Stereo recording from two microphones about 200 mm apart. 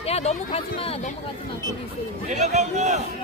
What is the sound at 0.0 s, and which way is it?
Speech, 30° left (ahead or behind).